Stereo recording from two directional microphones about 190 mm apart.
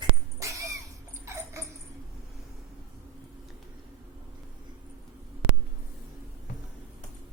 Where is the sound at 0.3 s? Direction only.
15° right (ahead or behind).